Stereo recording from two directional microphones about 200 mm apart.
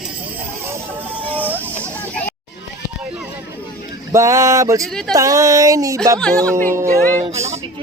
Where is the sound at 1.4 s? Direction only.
10° right (ahead or behind).